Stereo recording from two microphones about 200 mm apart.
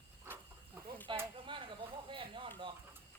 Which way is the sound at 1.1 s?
25° right (ahead or behind).